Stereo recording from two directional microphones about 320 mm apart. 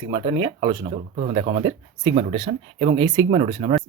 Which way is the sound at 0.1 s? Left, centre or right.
Centre.